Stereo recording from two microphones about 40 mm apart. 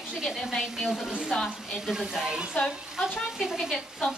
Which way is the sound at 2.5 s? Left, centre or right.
Left.